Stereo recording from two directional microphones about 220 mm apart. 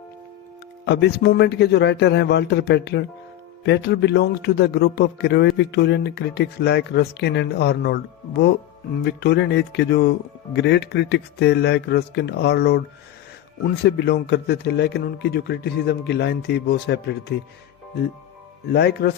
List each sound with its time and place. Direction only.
0.9 s speech: 50° left (ahead or behind)
13.8 s speech: 50° left (ahead or behind)
18.7 s speech: 45° left (ahead or behind)